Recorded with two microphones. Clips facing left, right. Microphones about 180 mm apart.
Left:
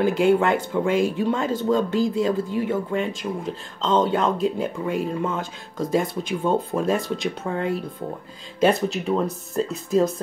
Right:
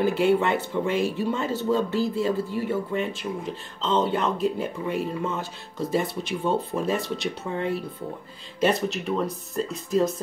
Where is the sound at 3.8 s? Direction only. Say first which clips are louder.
Left 3 dB; 45° left (ahead or behind).